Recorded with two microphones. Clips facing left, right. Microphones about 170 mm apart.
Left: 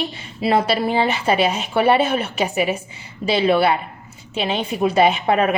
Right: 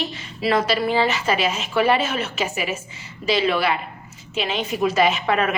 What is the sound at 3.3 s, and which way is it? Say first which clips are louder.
A woman's voice: left 4 dB; 30° left (ahead or behind).